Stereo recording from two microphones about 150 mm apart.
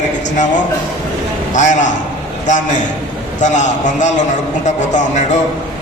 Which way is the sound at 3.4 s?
55° left (ahead or behind).